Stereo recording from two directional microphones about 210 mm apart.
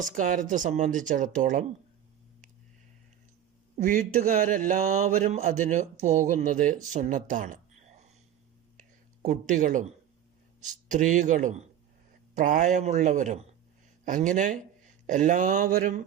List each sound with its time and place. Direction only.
0.0 s speech: 40° right (ahead or behind)
3.8 s speech: 40° right (ahead or behind)
8.8 s a sound: 35° right (ahead or behind)
10.6 s speech: 35° right (ahead or behind)